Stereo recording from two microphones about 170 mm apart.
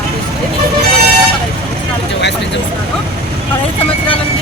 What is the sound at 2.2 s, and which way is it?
Vehicle, 90° left.